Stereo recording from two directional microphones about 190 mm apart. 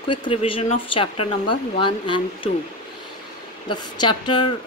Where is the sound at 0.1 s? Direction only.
30° left (ahead or behind).